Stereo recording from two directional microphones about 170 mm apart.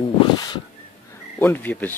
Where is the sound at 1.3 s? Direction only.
10° left (ahead or behind).